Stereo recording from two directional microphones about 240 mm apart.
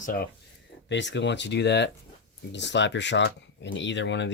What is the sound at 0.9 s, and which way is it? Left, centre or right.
Speech, left.